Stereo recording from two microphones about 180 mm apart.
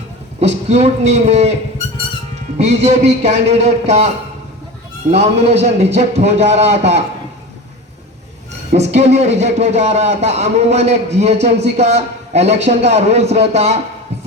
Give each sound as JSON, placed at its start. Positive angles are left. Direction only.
{"t": 0.3, "sound": "a man's voice", "side_deg": -35}
{"t": 2.6, "sound": "a man's voice", "side_deg": -35}
{"t": 5.1, "sound": "a man's voice", "side_deg": -35}
{"t": 8.7, "sound": "a man's voice", "side_deg": -35}